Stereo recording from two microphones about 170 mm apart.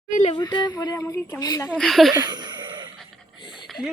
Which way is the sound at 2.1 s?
25° right (ahead or behind).